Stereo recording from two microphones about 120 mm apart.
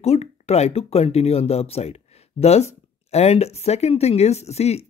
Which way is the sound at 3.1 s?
60° left (ahead or behind).